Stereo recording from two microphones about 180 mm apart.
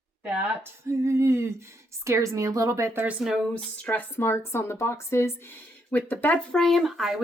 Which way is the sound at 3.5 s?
10° left (ahead or behind).